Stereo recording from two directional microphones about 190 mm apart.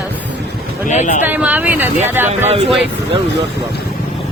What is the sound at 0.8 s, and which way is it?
Speech, 40° left (ahead or behind).